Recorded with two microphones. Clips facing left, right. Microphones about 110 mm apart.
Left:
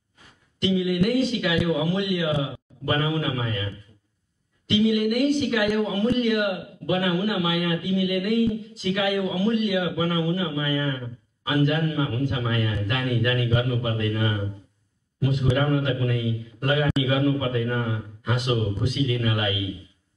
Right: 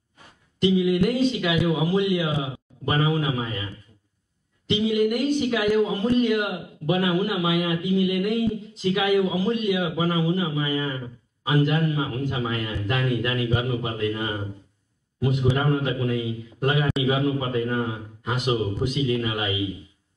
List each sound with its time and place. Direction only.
0.6 s a man's voice: 20° right (ahead or behind)
4.6 s a man's voice: 20° right (ahead or behind)